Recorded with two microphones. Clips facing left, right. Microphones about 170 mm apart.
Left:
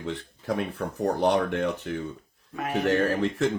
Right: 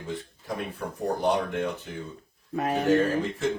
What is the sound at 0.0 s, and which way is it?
Speech, 75° left (ahead or behind).